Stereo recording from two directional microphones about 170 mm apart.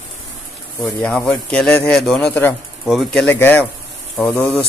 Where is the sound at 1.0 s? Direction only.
5° left (ahead or behind).